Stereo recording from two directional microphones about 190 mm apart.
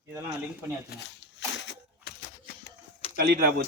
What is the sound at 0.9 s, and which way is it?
Speech, 65° left (ahead or behind).